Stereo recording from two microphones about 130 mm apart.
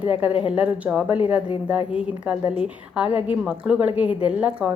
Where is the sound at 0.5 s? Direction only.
10° right (ahead or behind).